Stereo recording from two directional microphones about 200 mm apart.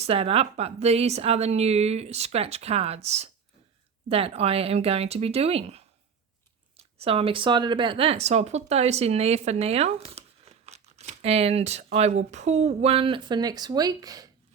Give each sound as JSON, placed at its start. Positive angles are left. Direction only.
{"t": 0.0, "sound": "speech", "side_deg": -30}
{"t": 7.0, "sound": "speech", "side_deg": -30}